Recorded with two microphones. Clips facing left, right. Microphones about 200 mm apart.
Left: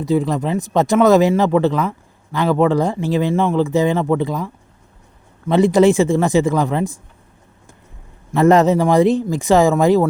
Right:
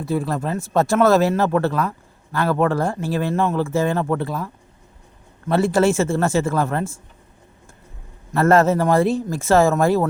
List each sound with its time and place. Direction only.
0.0 s speech: 15° left (ahead or behind)
8.3 s speech: 15° left (ahead or behind)